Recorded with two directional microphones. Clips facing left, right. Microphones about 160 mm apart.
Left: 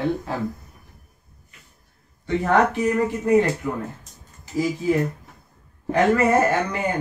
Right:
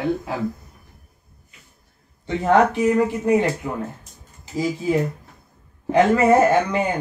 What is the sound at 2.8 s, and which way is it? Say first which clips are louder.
Speech: right 3 dB; 20° right (ahead or behind).